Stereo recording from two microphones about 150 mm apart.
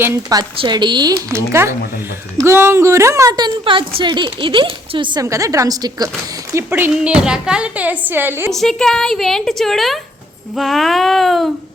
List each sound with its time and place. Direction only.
0.0 s a woman's voice: 20° right (ahead or behind)
5.2 s a woman's voice: 20° right (ahead or behind)
8.5 s a woman's voice: 5° left (ahead or behind)